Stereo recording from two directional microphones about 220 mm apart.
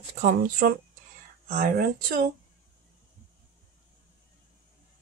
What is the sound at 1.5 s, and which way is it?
Speech, 40° right (ahead or behind).